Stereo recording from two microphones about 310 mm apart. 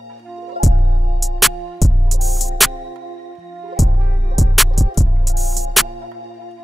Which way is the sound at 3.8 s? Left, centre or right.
Centre.